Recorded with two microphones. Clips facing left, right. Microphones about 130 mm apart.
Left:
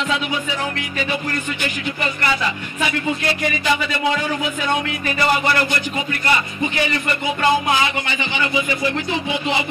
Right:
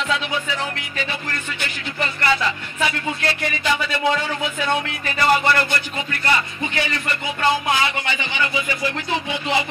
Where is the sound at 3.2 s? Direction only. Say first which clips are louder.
Left 3 dB; 15° left (ahead or behind).